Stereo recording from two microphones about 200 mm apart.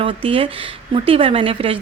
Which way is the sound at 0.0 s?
25° right (ahead or behind).